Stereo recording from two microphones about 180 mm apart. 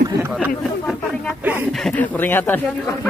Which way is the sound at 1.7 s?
5° left (ahead or behind).